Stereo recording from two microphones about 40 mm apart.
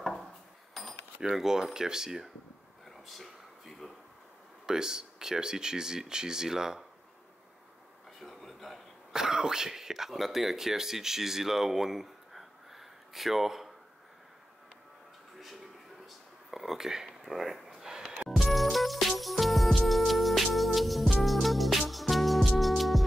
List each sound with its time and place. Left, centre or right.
0.0 s dishes: centre
0.8 s cutlery: centre
1.2 s speech: centre
3.1 s a sound: centre
4.6 s speech: centre
8.2 s a sound: centre
9.1 s speech: centre
15.3 s a sound: centre
18.4 s music: centre